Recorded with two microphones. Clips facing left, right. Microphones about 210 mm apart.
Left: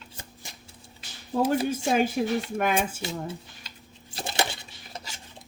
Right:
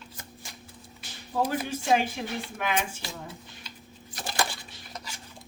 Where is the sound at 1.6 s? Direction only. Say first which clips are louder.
Left 2 dB; 45° left (ahead or behind).